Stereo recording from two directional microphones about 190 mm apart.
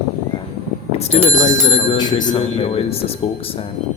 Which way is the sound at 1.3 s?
40° left (ahead or behind).